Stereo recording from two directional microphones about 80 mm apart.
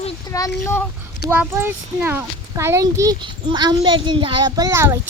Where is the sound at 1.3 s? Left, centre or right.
Right.